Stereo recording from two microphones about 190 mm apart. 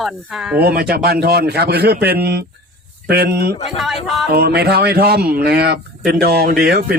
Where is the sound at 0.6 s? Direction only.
55° right (ahead or behind).